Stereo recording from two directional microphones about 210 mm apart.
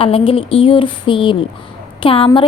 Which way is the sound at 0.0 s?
25° left (ahead or behind).